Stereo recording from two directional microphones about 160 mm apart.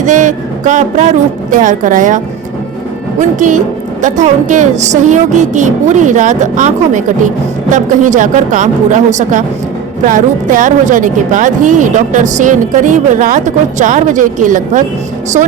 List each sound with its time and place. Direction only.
0.0 s a woman's voice: 50° right (ahead or behind)